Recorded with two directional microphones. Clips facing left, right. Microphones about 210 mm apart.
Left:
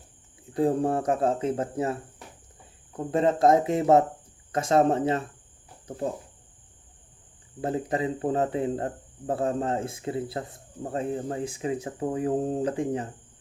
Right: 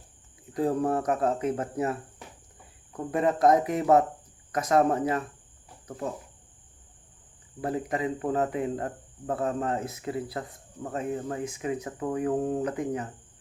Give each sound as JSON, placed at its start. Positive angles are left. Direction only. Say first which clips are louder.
{"t": 0.5, "sound": "speech", "louder": "left 2 dB", "side_deg": 30}
{"t": 7.6, "sound": "speech", "louder": "left 2 dB", "side_deg": 25}